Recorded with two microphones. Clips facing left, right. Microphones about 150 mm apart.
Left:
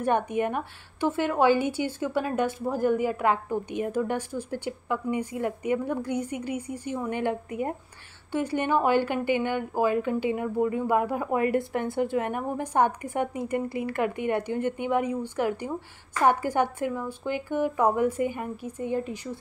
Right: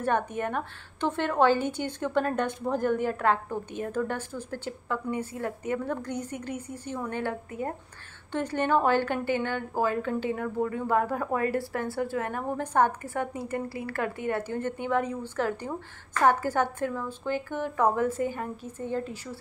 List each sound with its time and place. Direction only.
0.0 s a woman's voice: 15° left (ahead or behind)